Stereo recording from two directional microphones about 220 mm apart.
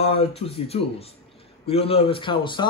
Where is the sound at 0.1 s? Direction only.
25° left (ahead or behind).